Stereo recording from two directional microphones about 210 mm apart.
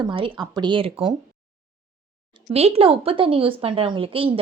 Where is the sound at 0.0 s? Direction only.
20° right (ahead or behind).